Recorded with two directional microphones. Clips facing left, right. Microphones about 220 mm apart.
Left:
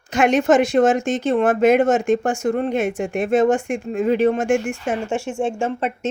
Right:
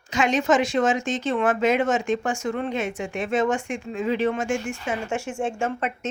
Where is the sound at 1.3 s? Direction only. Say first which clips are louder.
Left 5 dB; 40° left (ahead or behind).